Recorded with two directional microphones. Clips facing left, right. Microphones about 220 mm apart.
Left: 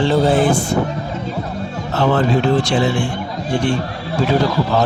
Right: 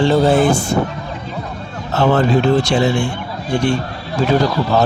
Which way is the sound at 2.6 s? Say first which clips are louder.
Right 1 dB; 45° right (ahead or behind).